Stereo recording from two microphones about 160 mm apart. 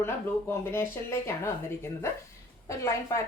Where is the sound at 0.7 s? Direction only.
15° left (ahead or behind).